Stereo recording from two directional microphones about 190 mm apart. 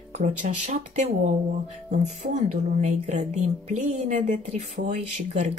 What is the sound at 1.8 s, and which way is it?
Speech, 40° right (ahead or behind).